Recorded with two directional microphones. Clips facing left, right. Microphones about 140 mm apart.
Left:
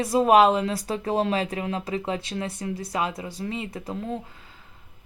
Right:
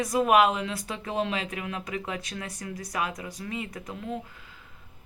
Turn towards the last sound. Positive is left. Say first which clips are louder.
# left 4 dB
turn(degrees=30)  # may be behind; listen again after turning